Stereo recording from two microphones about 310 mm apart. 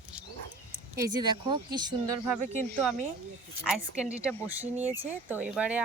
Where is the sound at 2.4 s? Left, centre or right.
Right.